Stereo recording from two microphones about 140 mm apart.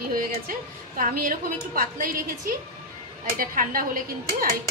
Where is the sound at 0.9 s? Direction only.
80° right.